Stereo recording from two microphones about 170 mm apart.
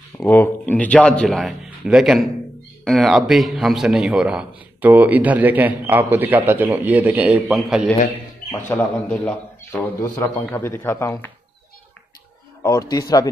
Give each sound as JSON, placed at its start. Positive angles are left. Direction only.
{"t": 0.2, "sound": "a man's voice", "side_deg": 10}
{"t": 8.5, "sound": "a man's voice", "side_deg": 10}
{"t": 12.9, "sound": "speech", "side_deg": 20}